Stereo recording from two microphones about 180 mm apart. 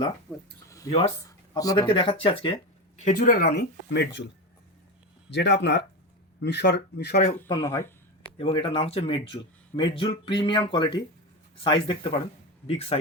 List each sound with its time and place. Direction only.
0.3 s speech: 10° right (ahead or behind)
0.7 s a sound: 20° left (ahead or behind)
1.5 s a man's voice: 20° left (ahead or behind)
3.0 s speech: 45° left (ahead or behind); by 4.3 s 75° left (ahead or behind)
5.3 s speech: 75° left (ahead or behind)
7.6 s speech: 15° left (ahead or behind)
8.4 s a man's voice: 30° left (ahead or behind)